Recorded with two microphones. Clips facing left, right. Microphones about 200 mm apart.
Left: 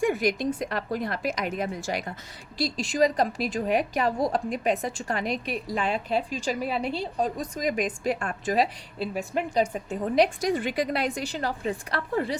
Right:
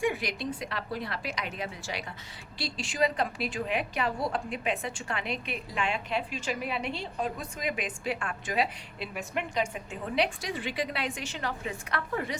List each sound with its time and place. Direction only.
0.0 s a woman's voice: 45° left (ahead or behind)